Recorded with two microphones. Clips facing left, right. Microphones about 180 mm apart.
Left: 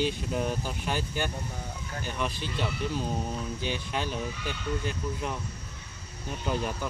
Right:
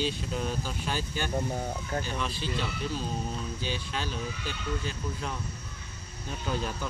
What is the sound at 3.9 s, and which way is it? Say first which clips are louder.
Speech: left 2 dB; 15° left (ahead or behind).